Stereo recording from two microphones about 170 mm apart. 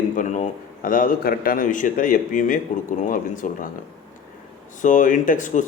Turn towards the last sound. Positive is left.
turn(degrees=50)  # may be behind; listen again after turning